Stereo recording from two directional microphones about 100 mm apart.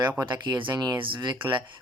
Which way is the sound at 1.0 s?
55° right (ahead or behind).